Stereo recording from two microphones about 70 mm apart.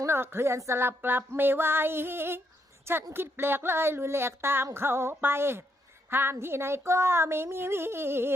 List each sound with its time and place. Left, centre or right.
0.0 s speech: right